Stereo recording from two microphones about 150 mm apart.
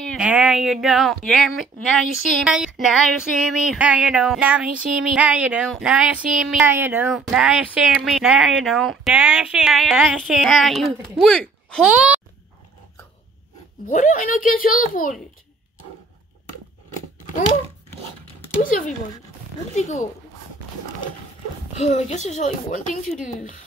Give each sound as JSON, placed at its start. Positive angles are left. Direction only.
{"t": 0.0, "sound": "a sound", "side_deg": 5}
{"t": 0.3, "sound": "speech", "side_deg": -5}
{"t": 7.1, "sound": "speech", "side_deg": 0}
{"t": 11.9, "sound": "speech", "side_deg": -10}
{"t": 13.8, "sound": "speech", "side_deg": 60}
{"t": 18.6, "sound": "speech", "side_deg": 65}
{"t": 19.7, "sound": "a child's voice", "side_deg": 50}
{"t": 21.7, "sound": "a child's voice", "side_deg": 50}